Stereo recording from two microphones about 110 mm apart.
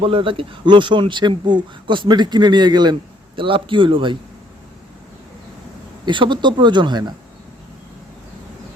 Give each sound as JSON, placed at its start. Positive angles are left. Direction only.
{"t": 0.0, "sound": "speech", "side_deg": -50}
{"t": 3.3, "sound": "speech", "side_deg": -50}
{"t": 6.1, "sound": "speech", "side_deg": -45}